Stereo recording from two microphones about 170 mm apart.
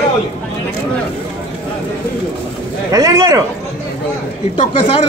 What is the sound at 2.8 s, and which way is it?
Speech, 20° right (ahead or behind).